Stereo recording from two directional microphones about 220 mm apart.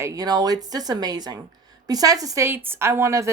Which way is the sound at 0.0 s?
15° right (ahead or behind).